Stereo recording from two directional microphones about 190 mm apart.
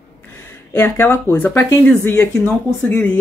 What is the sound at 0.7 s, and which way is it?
A man's voice, 10° left (ahead or behind).